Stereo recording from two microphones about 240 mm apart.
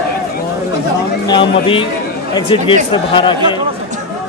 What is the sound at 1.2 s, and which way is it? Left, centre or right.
Speech, centre.